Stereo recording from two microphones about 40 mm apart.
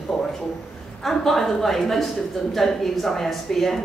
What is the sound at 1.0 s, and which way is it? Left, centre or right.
A woman's voice, centre.